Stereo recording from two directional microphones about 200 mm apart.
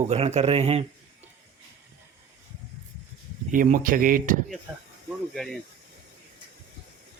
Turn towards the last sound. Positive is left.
turn(degrees=0)  # may be behind; listen again after turning